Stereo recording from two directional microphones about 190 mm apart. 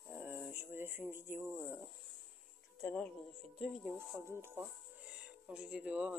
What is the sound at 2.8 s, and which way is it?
Speech, 5° left (ahead or behind).